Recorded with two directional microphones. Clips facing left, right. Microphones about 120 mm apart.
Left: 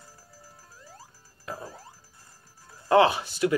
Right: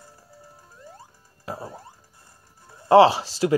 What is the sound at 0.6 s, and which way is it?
Music, 25° right (ahead or behind).